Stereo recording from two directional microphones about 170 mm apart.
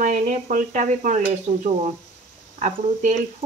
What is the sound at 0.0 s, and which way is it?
Stir, 50° right (ahead or behind).